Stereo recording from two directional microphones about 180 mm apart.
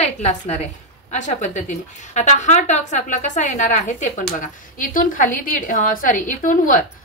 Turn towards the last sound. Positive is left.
turn(degrees=45)  # may be behind; listen again after turning